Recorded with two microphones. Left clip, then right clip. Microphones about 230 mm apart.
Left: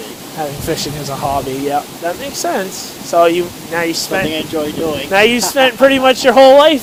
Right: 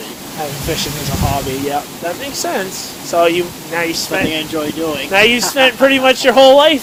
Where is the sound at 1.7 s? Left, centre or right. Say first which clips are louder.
Left 2 dB; left.